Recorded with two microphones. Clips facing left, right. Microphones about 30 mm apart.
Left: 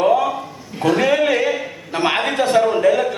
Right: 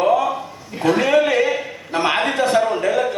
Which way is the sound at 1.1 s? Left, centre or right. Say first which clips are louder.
Right 1 dB; centre.